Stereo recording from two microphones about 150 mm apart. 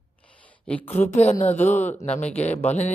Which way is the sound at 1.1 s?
45° left (ahead or behind).